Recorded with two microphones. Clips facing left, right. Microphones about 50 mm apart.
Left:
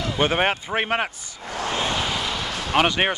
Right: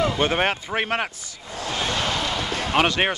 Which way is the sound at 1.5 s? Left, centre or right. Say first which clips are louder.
Left 3 dB; left.